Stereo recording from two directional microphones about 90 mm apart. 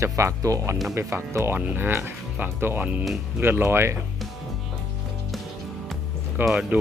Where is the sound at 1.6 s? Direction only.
20° right (ahead or behind).